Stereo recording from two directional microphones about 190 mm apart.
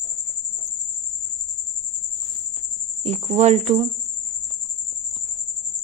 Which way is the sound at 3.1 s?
35° right (ahead or behind).